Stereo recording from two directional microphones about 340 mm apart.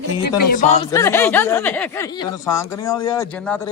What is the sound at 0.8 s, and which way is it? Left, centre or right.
Speech, centre.